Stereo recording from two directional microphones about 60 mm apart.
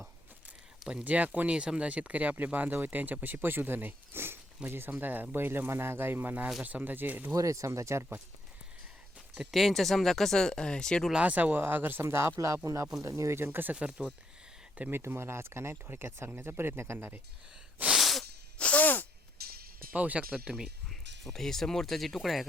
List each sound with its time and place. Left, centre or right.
1.0 s speech: right
7.3 s speech: right
9.3 s speech: centre
11.1 s speech: right
12.0 s speech: right
12.6 s speech: right
13.4 s speech: right
13.7 s speech: centre
14.8 s speech: right
17.9 s sneeze: centre
18.5 s sneeze: left
19.9 s speech: right
20.6 s speech: centre